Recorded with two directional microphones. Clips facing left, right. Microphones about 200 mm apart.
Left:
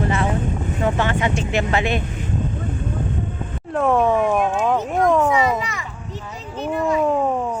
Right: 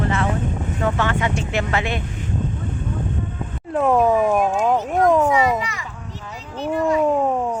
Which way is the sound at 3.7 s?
Centre (ahead or behind).